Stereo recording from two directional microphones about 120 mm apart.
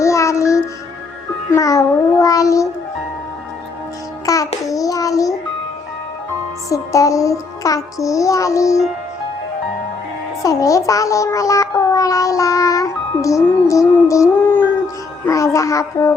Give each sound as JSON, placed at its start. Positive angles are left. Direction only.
{"t": 0.0, "sound": "music", "side_deg": 25}
{"t": 4.3, "sound": "child singing", "side_deg": 30}
{"t": 6.7, "sound": "music", "side_deg": 25}
{"t": 8.0, "sound": "child singing", "side_deg": 25}
{"t": 10.4, "sound": "a child's voice", "side_deg": 30}
{"t": 15.3, "sound": "child singing", "side_deg": 25}